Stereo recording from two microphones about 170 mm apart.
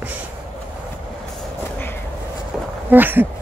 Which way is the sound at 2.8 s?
10° right (ahead or behind).